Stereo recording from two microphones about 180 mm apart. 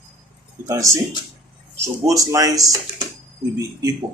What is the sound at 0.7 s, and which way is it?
Speech, 15° right (ahead or behind).